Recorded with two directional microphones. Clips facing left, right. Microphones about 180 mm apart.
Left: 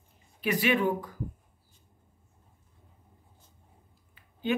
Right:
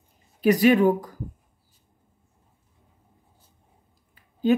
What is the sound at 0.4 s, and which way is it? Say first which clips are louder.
Speech: right 9 dB; 40° right (ahead or behind).